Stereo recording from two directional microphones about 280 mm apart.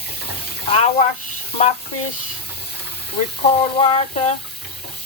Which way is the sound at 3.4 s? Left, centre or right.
Centre.